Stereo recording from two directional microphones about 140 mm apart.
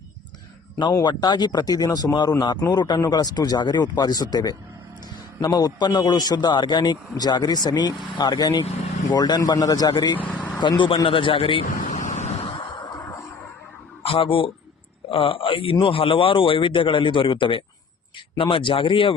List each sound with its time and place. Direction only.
0.8 s a man's voice: 30° left (ahead or behind)
11.7 s vehicle: 60° left (ahead or behind)
12.4 s a sound: 40° left (ahead or behind)
13.0 s music: 20° left (ahead or behind)
14.0 s a man's voice: 40° left (ahead or behind)